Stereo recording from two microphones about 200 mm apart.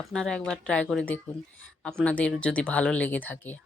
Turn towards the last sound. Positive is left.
turn(degrees=10)  # may be behind; listen again after turning